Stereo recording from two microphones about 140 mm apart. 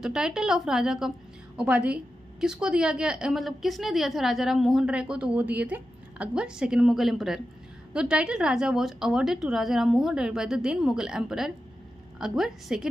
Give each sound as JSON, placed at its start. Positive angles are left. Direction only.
{"t": 0.0, "sound": "a woman's voice", "side_deg": -5}